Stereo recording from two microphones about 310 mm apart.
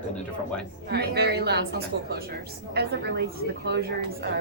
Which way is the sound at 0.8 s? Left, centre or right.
Right.